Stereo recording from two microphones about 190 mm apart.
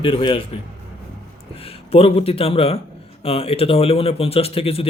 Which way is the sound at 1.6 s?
30° left (ahead or behind).